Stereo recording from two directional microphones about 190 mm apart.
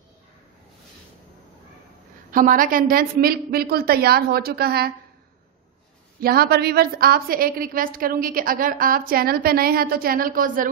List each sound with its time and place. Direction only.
2.3 s a woman's voice: 45° right (ahead or behind)
6.2 s a woman's voice: 55° right (ahead or behind)